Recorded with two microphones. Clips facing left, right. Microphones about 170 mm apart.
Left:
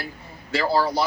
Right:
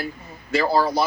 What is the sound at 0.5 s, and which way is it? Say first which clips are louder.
Speech: right 2 dB; 15° right (ahead or behind).